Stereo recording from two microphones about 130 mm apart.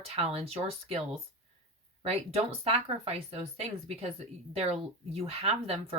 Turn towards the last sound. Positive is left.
turn(degrees=-50)  # may be behind; listen again after turning